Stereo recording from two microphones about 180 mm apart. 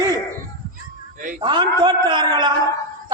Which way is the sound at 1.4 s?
25° right (ahead or behind).